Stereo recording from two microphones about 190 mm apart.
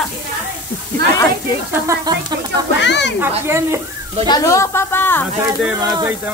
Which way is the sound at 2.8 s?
65° left (ahead or behind).